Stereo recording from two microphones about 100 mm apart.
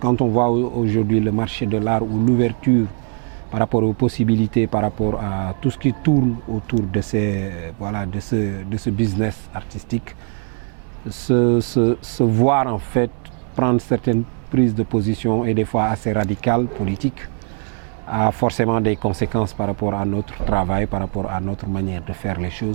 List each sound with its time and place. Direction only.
0.0 s speech: 15° right (ahead or behind)
11.3 s speech: 15° right (ahead or behind)
18.1 s speech: 15° right (ahead or behind)